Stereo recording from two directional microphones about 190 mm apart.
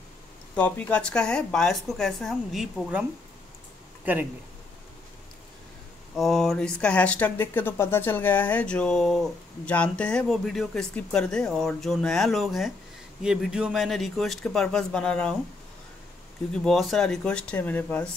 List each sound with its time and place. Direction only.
0.6 s speech: 5° left (ahead or behind); by 4.3 s 10° right (ahead or behind)
6.1 s speech: centre (ahead or behind)
16.6 s speech: centre (ahead or behind)